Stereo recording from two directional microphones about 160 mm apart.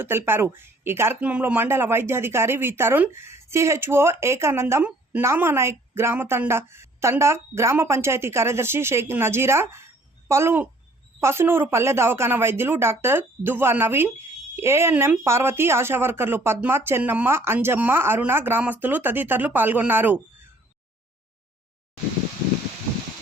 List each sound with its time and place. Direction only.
0.0 s speech: 15° right (ahead or behind)